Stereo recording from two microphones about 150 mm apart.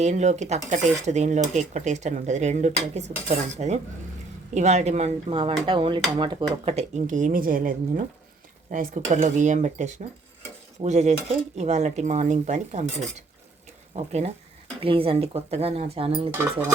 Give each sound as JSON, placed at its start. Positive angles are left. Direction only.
{"t": 0.0, "sound": "cutlery", "side_deg": -50}
{"t": 5.6, "sound": "speech", "side_deg": -35}
{"t": 6.7, "sound": "a woman's voice", "side_deg": -45}
{"t": 10.8, "sound": "cutlery", "side_deg": -50}
{"t": 14.8, "sound": "speech", "side_deg": -40}
{"t": 16.3, "sound": "speech", "side_deg": -15}